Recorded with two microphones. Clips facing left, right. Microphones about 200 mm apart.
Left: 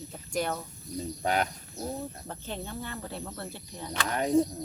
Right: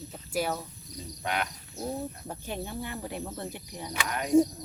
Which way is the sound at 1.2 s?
40° left (ahead or behind).